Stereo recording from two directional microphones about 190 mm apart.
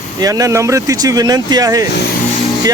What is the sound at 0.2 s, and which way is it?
Speech, 20° right (ahead or behind).